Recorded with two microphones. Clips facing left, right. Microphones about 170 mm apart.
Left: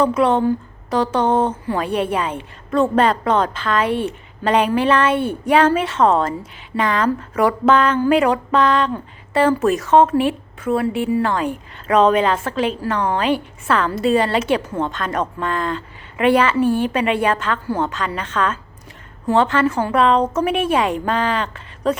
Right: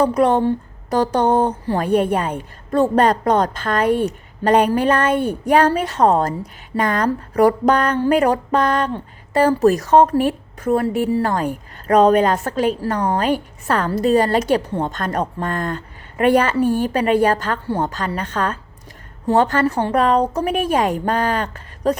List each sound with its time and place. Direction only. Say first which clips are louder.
0.0 s speech: right 1 dB; 40° right (ahead or behind)